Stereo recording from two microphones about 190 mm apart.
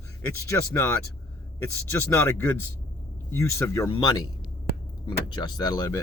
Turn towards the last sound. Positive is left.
turn(degrees=20)  # may be behind; listen again after turning